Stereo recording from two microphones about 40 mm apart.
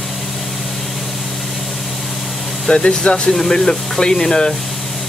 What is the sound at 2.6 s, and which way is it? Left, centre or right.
Speech, left.